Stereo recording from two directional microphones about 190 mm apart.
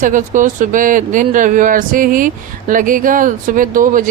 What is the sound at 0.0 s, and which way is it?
Speech, 40° right (ahead or behind).